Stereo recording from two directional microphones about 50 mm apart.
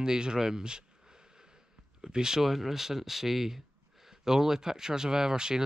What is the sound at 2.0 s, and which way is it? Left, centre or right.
Speech, centre.